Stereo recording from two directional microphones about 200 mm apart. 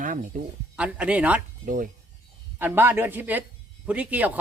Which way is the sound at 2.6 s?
10° right (ahead or behind).